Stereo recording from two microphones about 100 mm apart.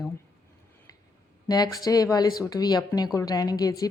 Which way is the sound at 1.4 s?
40° left (ahead or behind).